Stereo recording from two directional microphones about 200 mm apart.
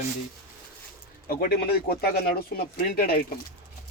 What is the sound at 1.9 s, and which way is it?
Speech, 50° left (ahead or behind).